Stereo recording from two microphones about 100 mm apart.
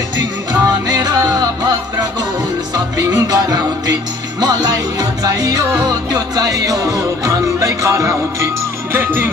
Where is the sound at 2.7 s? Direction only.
40° right (ahead or behind).